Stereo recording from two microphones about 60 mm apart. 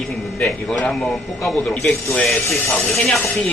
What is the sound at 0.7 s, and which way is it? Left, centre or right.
Speech, centre.